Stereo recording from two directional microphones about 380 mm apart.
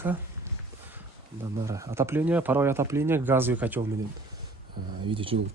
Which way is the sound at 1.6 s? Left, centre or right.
Centre.